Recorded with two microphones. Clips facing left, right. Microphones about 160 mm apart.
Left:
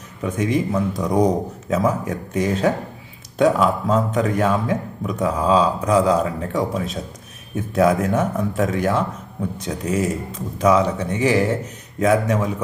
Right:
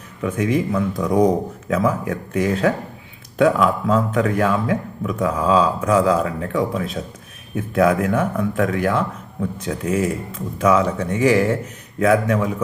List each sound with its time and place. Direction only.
0.2 s speech: 35° left (ahead or behind)